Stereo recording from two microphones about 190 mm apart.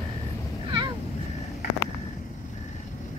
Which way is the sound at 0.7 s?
25° right (ahead or behind).